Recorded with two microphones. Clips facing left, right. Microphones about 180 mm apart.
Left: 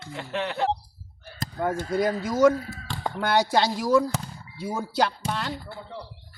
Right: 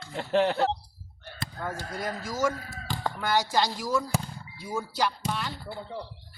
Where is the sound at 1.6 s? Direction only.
60° left (ahead or behind).